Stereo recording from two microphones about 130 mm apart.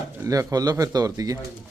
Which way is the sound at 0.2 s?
25° right (ahead or behind).